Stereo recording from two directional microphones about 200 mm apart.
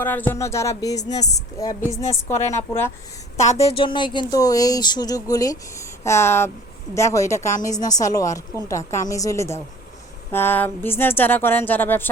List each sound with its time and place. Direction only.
0.0 s a woman's voice: 10° left (ahead or behind)
1.9 s a woman's voice: 35° left (ahead or behind)
2.3 s a woman's voice: 10° left (ahead or behind)
3.4 s a woman's voice: 30° left (ahead or behind); by 12.0 s 10° left (ahead or behind)